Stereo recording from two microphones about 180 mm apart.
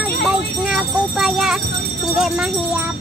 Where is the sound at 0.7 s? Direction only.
Centre (ahead or behind).